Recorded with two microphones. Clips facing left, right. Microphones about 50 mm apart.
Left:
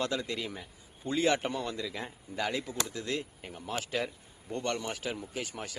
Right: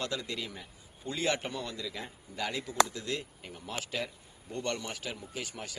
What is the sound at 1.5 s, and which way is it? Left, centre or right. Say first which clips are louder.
Speech: left 3 dB; centre.